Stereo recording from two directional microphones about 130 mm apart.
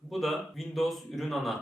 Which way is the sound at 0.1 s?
Centre (ahead or behind).